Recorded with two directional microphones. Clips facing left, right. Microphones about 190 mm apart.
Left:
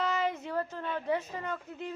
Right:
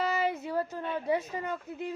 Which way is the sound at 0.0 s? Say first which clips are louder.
Right 1 dB; 10° right (ahead or behind).